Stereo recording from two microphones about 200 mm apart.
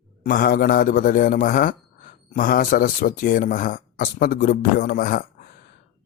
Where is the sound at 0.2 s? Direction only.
45° left (ahead or behind).